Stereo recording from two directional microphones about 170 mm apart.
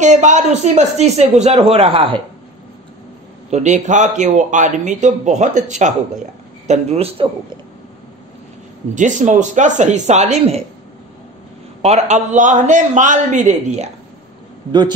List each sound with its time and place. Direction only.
0.0 s speech: 45° right (ahead or behind)
3.4 s a man's voice: 45° right (ahead or behind)
8.9 s a man's voice: 45° right (ahead or behind)
11.8 s a man's voice: 40° right (ahead or behind)